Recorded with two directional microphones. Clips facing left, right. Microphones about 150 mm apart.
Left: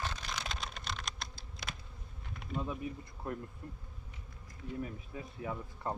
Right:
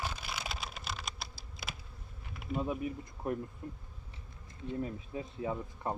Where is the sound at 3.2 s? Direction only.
15° right (ahead or behind).